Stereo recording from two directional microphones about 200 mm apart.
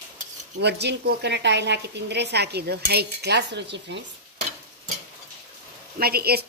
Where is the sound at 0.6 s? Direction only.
55° right (ahead or behind).